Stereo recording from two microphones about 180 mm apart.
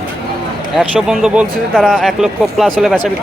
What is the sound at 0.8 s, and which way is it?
Speech, 5° right (ahead or behind).